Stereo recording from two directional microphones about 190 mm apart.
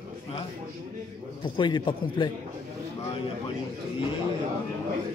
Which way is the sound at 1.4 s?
25° left (ahead or behind).